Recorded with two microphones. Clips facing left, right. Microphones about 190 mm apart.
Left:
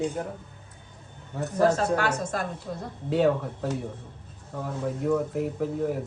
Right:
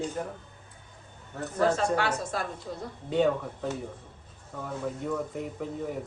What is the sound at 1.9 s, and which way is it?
Speech, 45° left (ahead or behind).